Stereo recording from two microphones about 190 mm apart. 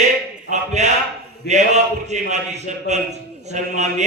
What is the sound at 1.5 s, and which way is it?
A man's voice, 35° right (ahead or behind).